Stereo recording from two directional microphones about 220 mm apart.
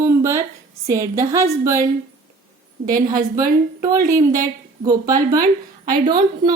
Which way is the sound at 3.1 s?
15° right (ahead or behind).